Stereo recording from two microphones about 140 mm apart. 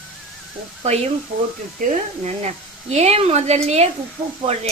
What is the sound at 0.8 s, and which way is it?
A woman's voice, 50° right (ahead or behind).